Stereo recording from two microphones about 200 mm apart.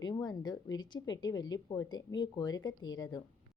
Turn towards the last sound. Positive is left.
turn(degrees=20)  # may be behind; listen again after turning